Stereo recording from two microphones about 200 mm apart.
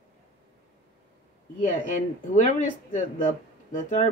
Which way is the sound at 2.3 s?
40° left (ahead or behind).